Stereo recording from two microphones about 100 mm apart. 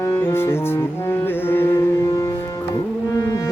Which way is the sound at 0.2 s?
25° left (ahead or behind).